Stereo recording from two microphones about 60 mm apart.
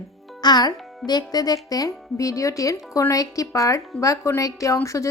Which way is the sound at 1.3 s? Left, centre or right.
Left.